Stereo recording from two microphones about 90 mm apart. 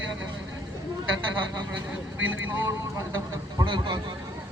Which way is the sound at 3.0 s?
40° right (ahead or behind).